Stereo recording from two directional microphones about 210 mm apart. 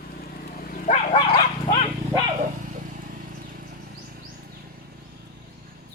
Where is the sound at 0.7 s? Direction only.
40° left (ahead or behind).